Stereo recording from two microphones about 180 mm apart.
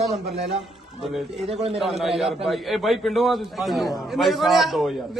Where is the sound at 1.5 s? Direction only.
35° right (ahead or behind).